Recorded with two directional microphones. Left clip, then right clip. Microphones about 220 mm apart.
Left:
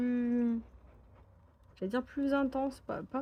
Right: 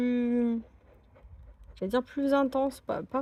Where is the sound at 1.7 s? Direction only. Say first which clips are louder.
Right 6 dB; 40° right (ahead or behind).